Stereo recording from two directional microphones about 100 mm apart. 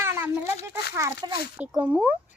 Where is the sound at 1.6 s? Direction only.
10° right (ahead or behind).